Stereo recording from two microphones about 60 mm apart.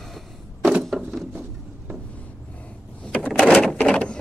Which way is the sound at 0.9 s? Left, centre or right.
Centre.